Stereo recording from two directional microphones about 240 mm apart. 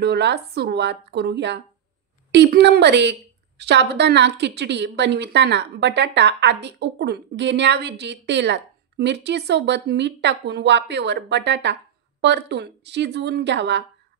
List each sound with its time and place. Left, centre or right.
0.0 s a woman's voice: right